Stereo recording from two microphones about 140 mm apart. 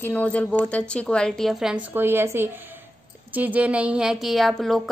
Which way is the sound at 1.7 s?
15° right (ahead or behind).